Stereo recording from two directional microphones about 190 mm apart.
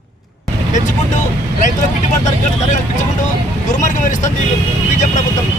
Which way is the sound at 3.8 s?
40° left (ahead or behind).